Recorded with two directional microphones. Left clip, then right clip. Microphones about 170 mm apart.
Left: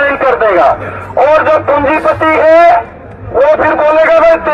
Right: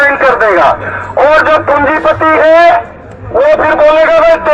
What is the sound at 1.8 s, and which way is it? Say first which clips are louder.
Speech: right 1 dB; 30° right (ahead or behind).